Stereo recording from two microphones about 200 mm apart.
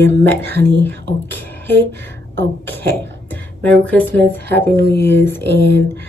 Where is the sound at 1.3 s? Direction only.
10° left (ahead or behind).